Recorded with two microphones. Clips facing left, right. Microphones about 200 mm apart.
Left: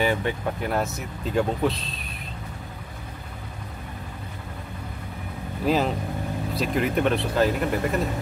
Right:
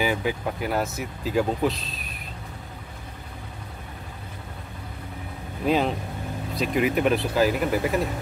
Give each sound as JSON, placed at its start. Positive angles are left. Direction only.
{"t": 0.0, "sound": "speech", "side_deg": -5}
{"t": 5.7, "sound": "speech", "side_deg": 0}